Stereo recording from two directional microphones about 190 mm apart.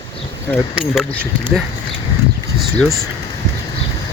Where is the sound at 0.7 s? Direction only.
5° right (ahead or behind).